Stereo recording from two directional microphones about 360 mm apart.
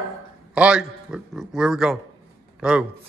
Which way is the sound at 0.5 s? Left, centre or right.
Centre.